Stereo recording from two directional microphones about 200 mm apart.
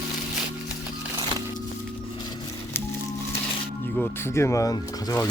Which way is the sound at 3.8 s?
10° left (ahead or behind).